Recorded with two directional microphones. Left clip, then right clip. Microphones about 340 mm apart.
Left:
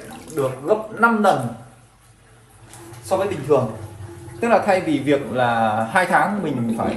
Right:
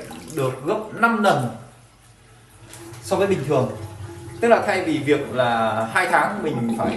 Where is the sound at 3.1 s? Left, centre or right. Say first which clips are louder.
Right 1 dB; centre.